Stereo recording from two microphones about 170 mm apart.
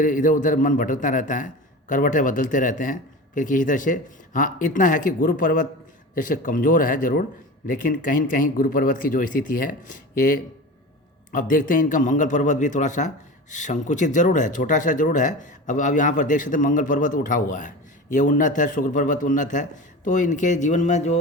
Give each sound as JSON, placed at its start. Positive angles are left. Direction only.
{"t": 0.0, "sound": "a man's voice", "side_deg": 50}